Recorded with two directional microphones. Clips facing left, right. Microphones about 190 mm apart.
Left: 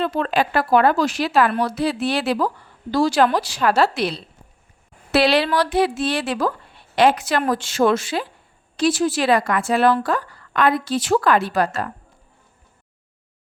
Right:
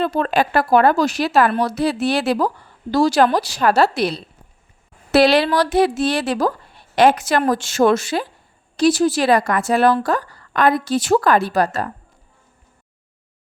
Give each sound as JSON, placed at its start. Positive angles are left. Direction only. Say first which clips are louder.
{"t": 0.0, "sound": "a woman's voice", "louder": "right 2 dB", "side_deg": -45}